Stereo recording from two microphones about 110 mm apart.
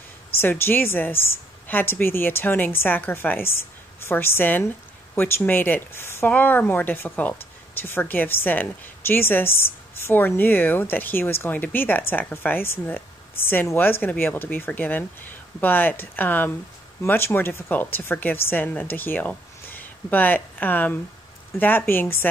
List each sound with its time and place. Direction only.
0.4 s a woman's voice: 20° left (ahead or behind)